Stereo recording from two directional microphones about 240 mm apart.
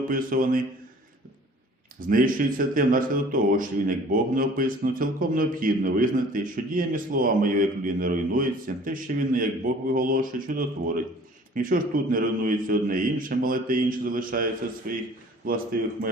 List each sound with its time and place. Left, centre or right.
0.1 s a man's voice: right
2.0 s a man's voice: right